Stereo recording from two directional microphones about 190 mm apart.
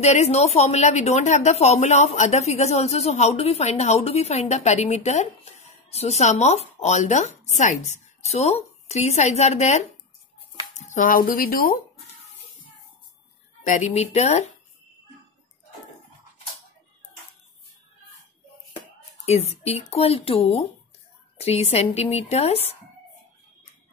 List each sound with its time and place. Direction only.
0.0 s speech: 35° left (ahead or behind)
10.5 s music: 40° left (ahead or behind)
13.7 s speech: 40° left (ahead or behind)
19.2 s speech: 35° left (ahead or behind)